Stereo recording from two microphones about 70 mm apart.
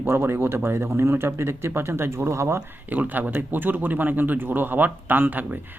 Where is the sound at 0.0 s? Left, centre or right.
Right.